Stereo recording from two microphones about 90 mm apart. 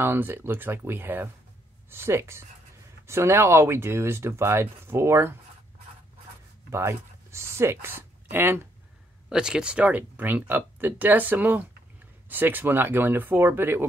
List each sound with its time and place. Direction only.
0.0 s speech: 25° right (ahead or behind)
6.7 s speech: 30° right (ahead or behind)
9.3 s speech: 10° right (ahead or behind); by 13.8 s 25° right (ahead or behind)